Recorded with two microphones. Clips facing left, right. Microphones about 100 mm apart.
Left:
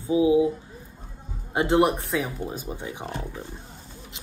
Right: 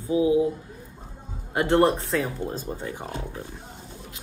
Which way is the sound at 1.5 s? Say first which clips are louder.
Right 1 dB; 15° left (ahead or behind).